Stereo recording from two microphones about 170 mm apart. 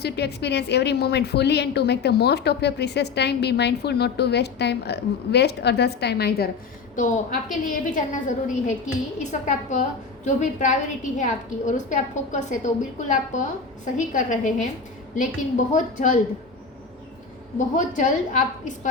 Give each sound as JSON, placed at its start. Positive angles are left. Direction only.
{"t": 0.0, "sound": "a woman's voice", "side_deg": 75}
{"t": 6.9, "sound": "a woman's voice", "side_deg": 50}
{"t": 17.7, "sound": "a woman's voice", "side_deg": 45}